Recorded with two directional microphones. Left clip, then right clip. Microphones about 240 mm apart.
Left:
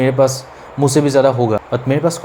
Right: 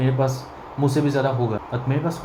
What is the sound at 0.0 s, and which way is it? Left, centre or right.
Speech, left.